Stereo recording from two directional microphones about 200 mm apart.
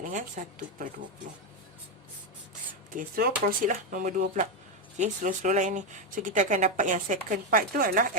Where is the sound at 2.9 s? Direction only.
45° right (ahead or behind).